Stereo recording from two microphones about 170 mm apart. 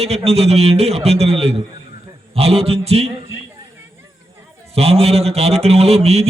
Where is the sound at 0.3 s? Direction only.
40° right (ahead or behind).